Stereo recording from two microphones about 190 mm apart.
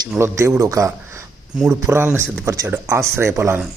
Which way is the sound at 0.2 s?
15° right (ahead or behind).